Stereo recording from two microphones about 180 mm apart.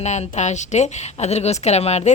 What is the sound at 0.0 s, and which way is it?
A woman's voice, 40° left (ahead or behind).